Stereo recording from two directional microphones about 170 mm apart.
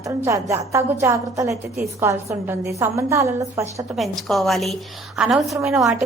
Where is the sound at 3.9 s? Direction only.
Centre (ahead or behind).